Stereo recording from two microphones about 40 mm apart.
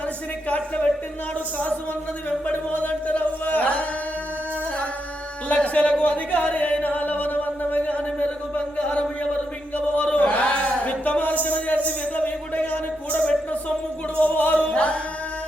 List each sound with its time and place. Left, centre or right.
0.4 s music: left
2.5 s chant: left
5.5 s a sound: left
9.7 s speech: left
10.1 s a sound: left
14.2 s music: left